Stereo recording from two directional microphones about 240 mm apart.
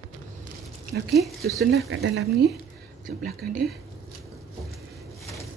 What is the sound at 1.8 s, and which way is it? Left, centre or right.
Speech, right.